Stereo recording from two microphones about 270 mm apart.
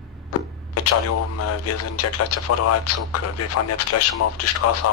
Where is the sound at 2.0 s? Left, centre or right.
Left.